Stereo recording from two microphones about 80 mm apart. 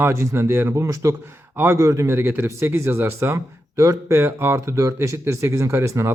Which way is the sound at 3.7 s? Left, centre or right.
Right.